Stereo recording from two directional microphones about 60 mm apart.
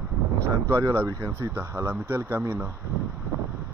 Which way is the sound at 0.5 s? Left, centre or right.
Right.